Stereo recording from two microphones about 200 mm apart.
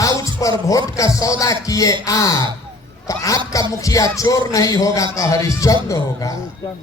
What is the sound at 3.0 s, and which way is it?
Speech, 15° left (ahead or behind).